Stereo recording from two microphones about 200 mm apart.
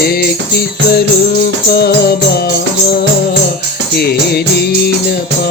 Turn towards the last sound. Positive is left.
turn(degrees=55)  # may be behind; listen again after turning